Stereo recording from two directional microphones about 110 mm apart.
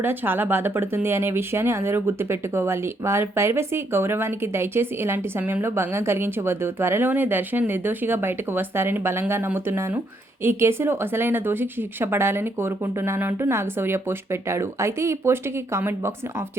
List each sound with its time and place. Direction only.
0.0 s speech: 20° right (ahead or behind)